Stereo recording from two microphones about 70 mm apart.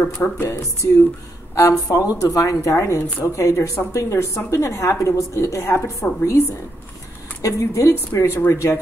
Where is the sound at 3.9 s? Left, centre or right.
Left.